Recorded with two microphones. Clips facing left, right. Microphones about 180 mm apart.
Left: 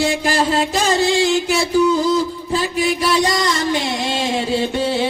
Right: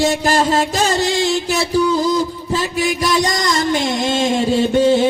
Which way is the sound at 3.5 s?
45° right (ahead or behind).